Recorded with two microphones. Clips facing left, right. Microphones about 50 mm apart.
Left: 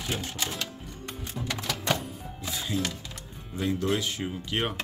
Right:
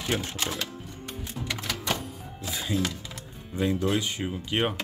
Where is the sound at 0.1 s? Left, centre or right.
Right.